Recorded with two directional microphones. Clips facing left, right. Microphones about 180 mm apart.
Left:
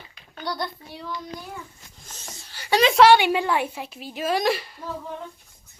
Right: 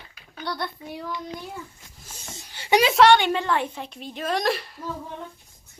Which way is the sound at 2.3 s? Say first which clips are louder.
Right 2 dB; 20° right (ahead or behind).